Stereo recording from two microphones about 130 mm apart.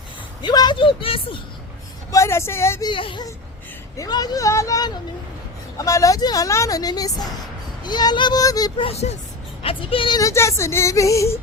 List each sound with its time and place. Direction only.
0.4 s speech: 35° left (ahead or behind)
2.1 s speech: 20° left (ahead or behind)
2.8 s speech: 40° left (ahead or behind)
3.9 s speech: 30° left (ahead or behind)
8.8 s speech: 50° left (ahead or behind)
10.2 s speech: 25° left (ahead or behind)